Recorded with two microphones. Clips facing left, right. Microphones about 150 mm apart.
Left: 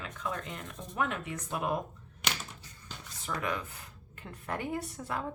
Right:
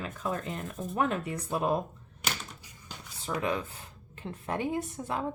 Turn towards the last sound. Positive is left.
turn(degrees=-25)  # may be behind; listen again after turning